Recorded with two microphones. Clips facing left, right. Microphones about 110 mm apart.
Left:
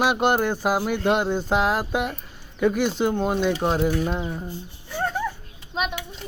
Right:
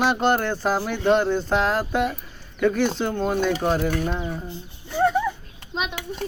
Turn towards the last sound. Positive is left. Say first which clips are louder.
# left 1 dB
turn(degrees=5)  # may be behind; listen again after turning